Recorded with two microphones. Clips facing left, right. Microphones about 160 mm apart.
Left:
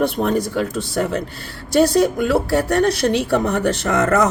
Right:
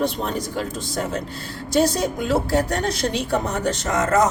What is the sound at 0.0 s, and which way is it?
Speech, 55° left (ahead or behind).